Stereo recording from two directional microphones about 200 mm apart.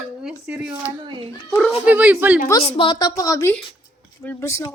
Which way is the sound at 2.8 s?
20° left (ahead or behind).